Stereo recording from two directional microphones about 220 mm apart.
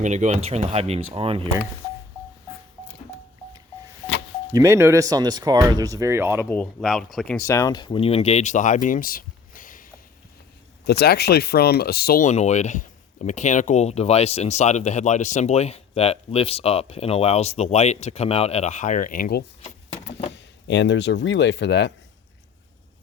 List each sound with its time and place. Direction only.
0.0 s speech: 30° right (ahead or behind)
4.5 s speech: 15° right (ahead or behind)
6.4 s speech: 10° left (ahead or behind); by 19.5 s 45° left (ahead or behind)
19.6 s vehicle: 30° left (ahead or behind)
20.3 s speech: 55° left (ahead or behind)